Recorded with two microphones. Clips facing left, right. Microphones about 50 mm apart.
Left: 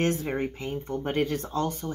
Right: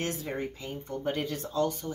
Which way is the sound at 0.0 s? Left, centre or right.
Left.